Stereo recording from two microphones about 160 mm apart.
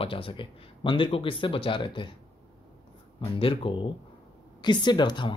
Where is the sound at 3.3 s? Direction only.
35° left (ahead or behind).